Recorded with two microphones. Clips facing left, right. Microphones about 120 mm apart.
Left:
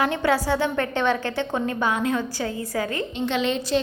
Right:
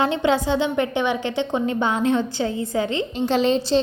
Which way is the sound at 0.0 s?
20° right (ahead or behind).